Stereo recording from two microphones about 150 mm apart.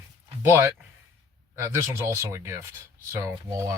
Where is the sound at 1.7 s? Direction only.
15° right (ahead or behind).